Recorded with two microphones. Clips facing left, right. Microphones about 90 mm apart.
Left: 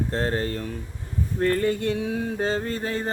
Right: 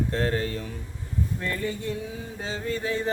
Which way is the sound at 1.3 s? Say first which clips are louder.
Left 12 dB; 50° left (ahead or behind).